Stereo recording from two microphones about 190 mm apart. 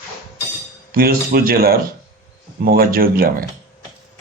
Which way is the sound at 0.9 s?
50° right (ahead or behind).